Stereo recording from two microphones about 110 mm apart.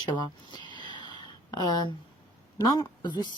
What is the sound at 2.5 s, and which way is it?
Speech, 35° left (ahead or behind).